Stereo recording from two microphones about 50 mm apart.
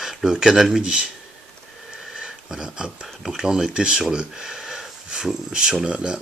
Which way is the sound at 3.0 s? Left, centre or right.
Centre.